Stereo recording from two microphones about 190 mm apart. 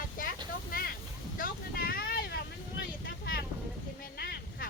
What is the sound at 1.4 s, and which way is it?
Vehicle, 50° left (ahead or behind).